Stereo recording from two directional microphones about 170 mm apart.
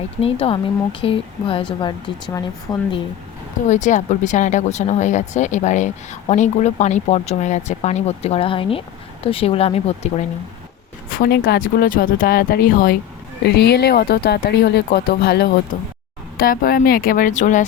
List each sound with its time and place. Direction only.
0.2 s speech: 35° left (ahead or behind)
3.7 s speech: 45° left (ahead or behind)
11.1 s speech: 60° left (ahead or behind)
13.4 s speech: 75° left (ahead or behind); by 17.7 s 45° left (ahead or behind)